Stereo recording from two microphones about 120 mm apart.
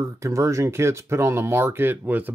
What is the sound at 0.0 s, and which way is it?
Speech, 25° right (ahead or behind).